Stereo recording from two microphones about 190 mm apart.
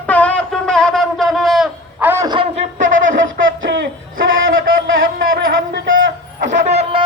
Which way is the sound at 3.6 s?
80° right.